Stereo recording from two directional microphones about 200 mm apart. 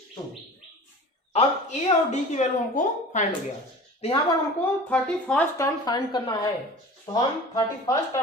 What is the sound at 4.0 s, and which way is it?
Speech, 25° left (ahead or behind).